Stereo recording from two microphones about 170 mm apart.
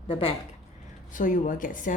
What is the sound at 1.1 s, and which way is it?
Speech, 50° left (ahead or behind).